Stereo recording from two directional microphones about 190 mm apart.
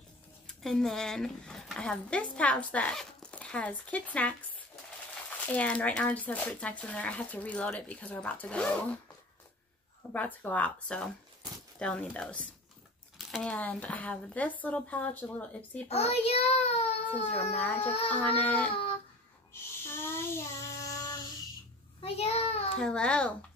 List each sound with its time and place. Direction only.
0.5 s speech: 5° left (ahead or behind)
5.5 s speech: 10° left (ahead or behind)
10.1 s speech: 10° left (ahead or behind)
15.9 s a child's voice: 35° left (ahead or behind)
17.6 s speech: 10° left (ahead or behind)
19.8 s child singing: 15° left (ahead or behind)
22.0 s child singing: 30° left (ahead or behind)
22.8 s speech: 5° left (ahead or behind)